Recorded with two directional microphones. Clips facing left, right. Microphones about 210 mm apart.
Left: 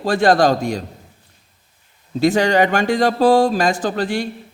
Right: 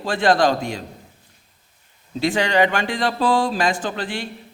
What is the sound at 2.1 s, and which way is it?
Speech, 45° left (ahead or behind).